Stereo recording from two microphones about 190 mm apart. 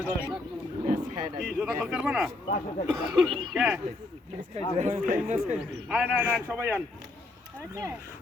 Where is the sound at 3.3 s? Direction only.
25° right (ahead or behind).